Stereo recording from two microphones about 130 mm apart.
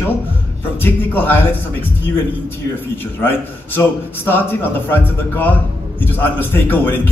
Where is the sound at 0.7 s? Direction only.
15° left (ahead or behind).